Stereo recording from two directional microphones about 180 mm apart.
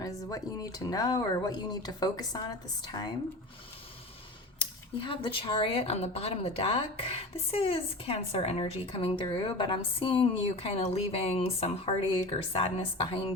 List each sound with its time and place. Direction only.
0.0 s speech: 20° left (ahead or behind)
4.9 s speech: 25° left (ahead or behind)